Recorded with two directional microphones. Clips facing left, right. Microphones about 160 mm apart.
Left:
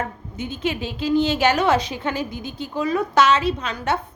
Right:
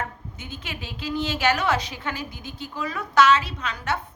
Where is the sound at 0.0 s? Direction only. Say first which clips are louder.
Left 5 dB; 20° left (ahead or behind).